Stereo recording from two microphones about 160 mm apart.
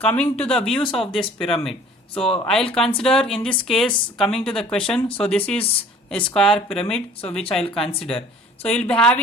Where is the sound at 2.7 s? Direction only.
5° left (ahead or behind).